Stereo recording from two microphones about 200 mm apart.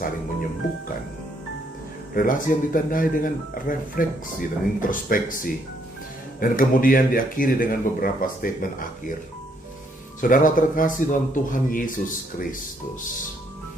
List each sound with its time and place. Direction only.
0.0 s speech: 45° left (ahead or behind)
2.1 s speech: 45° left (ahead or behind)
10.2 s speech: 40° left (ahead or behind)